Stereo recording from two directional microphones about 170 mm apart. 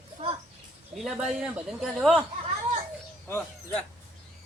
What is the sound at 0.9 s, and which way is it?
Speech, centre (ahead or behind).